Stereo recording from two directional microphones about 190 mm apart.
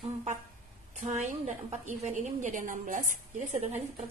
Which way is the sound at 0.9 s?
40° right (ahead or behind).